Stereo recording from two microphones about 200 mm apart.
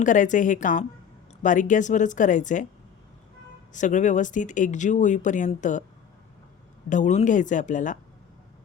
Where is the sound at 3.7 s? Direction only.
40° left (ahead or behind).